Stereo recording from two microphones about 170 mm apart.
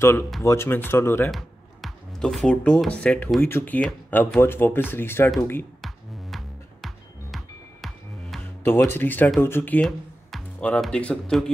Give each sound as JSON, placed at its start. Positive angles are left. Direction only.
{"t": 0.0, "sound": "speech", "side_deg": 15}
{"t": 1.3, "sound": "speech", "side_deg": 0}
{"t": 6.3, "sound": "music", "side_deg": 0}
{"t": 8.6, "sound": "speech", "side_deg": 15}